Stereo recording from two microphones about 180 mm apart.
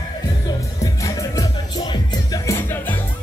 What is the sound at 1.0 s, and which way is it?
Music, 20° left (ahead or behind).